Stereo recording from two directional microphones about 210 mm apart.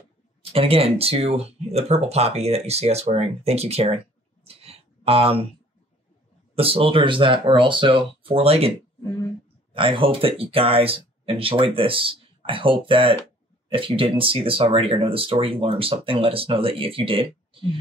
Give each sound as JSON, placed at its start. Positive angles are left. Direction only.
{"t": 0.5, "sound": "speech", "side_deg": -25}
{"t": 4.6, "sound": "a sound", "side_deg": -30}
{"t": 6.5, "sound": "speech", "side_deg": -25}